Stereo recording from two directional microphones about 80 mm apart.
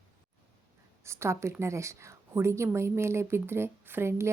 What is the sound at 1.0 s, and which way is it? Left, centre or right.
Speech, right.